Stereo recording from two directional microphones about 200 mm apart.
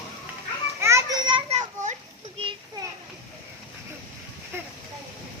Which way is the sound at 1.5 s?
35° right (ahead or behind).